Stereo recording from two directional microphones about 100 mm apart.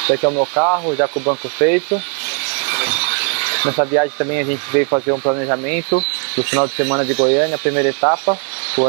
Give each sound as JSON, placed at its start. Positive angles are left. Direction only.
{"t": 0.0, "sound": "speech", "side_deg": -15}
{"t": 2.6, "sound": "mechanisms", "side_deg": -15}
{"t": 4.9, "sound": "speech", "side_deg": -30}